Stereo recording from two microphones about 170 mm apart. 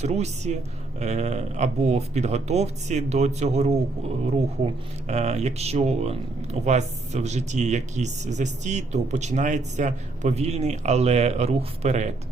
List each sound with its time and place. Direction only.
0.0 s speech: 40° right (ahead or behind)